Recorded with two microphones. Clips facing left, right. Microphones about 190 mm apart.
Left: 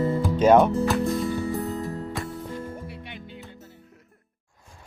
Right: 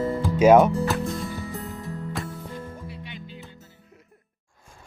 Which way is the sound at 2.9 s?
60° left (ahead or behind).